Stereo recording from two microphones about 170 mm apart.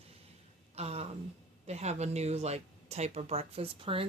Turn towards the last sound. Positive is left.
turn(degrees=-35)  # may be behind; listen again after turning